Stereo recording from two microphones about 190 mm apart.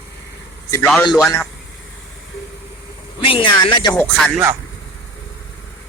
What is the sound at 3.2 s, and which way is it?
Speech, 30° left (ahead or behind).